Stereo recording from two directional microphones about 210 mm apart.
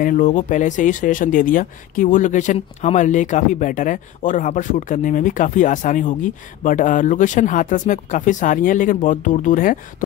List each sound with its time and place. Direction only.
0.0 s speech: 40° left (ahead or behind)